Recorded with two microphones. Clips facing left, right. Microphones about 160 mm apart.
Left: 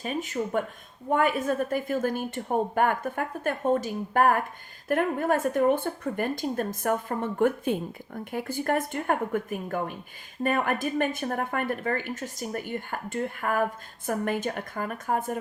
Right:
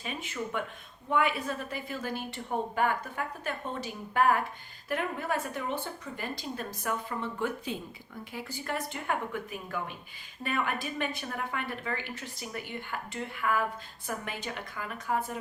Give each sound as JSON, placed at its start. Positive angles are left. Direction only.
{"t": 0.0, "sound": "speech", "side_deg": 45}